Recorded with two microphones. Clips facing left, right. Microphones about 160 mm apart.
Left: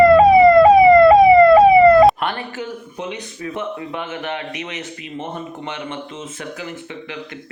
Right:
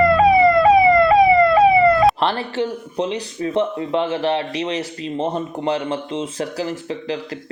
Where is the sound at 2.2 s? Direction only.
30° right (ahead or behind).